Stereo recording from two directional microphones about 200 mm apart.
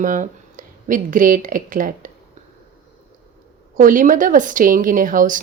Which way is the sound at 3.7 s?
40° right (ahead or behind).